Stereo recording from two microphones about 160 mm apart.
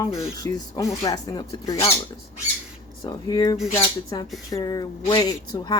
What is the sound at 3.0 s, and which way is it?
Speech, 25° left (ahead or behind).